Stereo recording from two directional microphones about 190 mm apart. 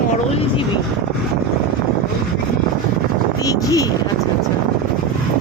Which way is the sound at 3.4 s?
20° left (ahead or behind).